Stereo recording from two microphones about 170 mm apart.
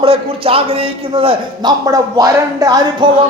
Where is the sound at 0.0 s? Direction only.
35° right (ahead or behind).